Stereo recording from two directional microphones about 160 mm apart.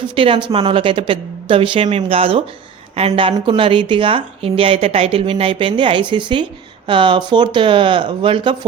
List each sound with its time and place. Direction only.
0.2 s a woman's voice: 30° right (ahead or behind)